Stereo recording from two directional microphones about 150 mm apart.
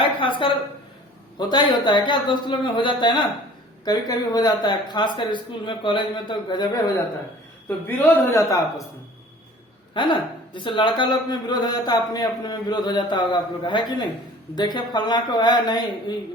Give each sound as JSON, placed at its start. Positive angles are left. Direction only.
{"t": 0.0, "sound": "a woman's voice", "side_deg": 35}
{"t": 7.9, "sound": "a man's voice", "side_deg": 10}
{"t": 9.9, "sound": "a man's voice", "side_deg": 30}